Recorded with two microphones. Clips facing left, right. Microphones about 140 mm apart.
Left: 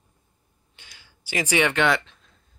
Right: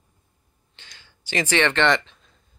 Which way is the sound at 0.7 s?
10° left (ahead or behind).